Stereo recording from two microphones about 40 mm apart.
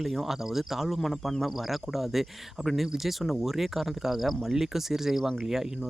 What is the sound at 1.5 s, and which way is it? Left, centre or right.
Speech, centre.